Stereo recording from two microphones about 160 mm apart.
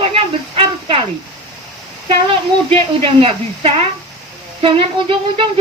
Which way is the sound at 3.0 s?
35° right (ahead or behind).